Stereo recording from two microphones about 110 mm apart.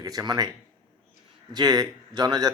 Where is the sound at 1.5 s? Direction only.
35° right (ahead or behind).